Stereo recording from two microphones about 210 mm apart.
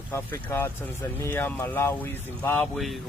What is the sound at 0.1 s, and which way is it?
Speech, 10° left (ahead or behind).